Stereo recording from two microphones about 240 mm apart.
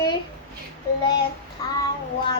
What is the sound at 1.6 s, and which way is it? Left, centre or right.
Child singing, centre.